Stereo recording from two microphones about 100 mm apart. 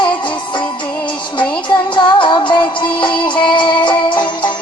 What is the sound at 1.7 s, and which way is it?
Music, 50° left (ahead or behind).